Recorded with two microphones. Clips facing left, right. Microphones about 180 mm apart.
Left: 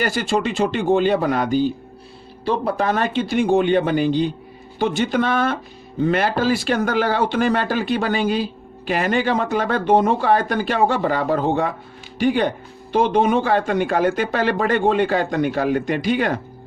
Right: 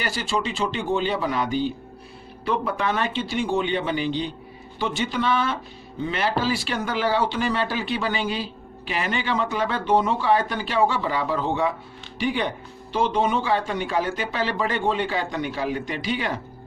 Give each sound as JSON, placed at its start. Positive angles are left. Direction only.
{"t": 0.0, "sound": "speech", "side_deg": 50}
{"t": 2.4, "sound": "speech", "side_deg": 35}